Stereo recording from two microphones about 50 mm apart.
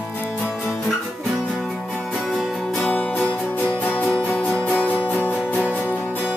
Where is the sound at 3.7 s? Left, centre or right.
Left.